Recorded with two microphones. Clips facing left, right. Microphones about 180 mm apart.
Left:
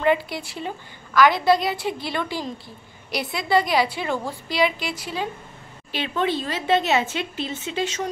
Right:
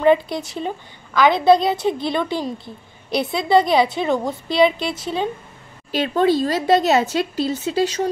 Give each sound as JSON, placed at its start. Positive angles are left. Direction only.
{"t": 0.0, "sound": "a woman's voice", "side_deg": -20}
{"t": 5.9, "sound": "a woman's voice", "side_deg": -40}